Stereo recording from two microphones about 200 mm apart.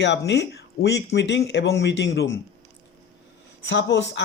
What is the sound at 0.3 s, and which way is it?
Speech, 55° left (ahead or behind).